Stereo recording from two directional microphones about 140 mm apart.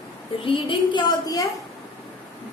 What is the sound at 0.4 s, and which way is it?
A woman's voice, 35° left (ahead or behind).